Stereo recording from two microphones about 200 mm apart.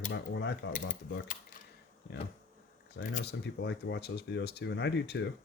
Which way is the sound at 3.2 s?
55° left (ahead or behind).